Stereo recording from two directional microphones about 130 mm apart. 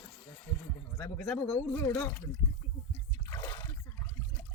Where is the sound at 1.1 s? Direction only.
10° left (ahead or behind).